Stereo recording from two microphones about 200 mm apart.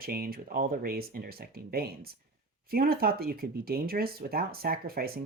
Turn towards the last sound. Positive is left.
turn(degrees=-50)  # may be behind; listen again after turning